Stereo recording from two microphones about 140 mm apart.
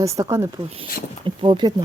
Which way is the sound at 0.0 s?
20° right (ahead or behind).